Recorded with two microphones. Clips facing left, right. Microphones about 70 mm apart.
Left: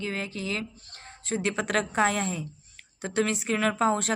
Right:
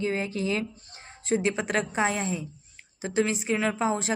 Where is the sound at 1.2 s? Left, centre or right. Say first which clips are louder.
Right 3 dB; centre.